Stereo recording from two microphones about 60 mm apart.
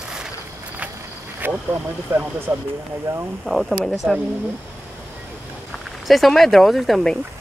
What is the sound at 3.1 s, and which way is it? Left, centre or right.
Speech, right.